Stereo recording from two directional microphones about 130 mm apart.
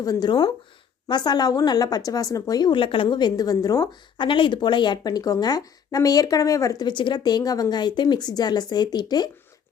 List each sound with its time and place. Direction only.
0.0 s speech: 30° left (ahead or behind)
6.8 s speech: 35° left (ahead or behind)